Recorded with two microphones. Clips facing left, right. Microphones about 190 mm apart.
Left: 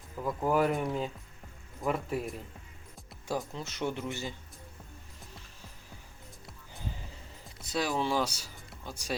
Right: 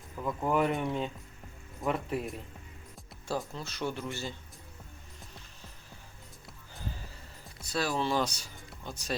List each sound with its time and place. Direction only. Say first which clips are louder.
0.2 s speech: left 1 dB; 5° left (ahead or behind)
3.2 s speech: even; 15° left (ahead or behind)
7.6 s speech: even; 15° left (ahead or behind)